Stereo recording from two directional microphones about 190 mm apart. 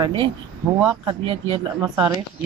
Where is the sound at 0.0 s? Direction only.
25° right (ahead or behind).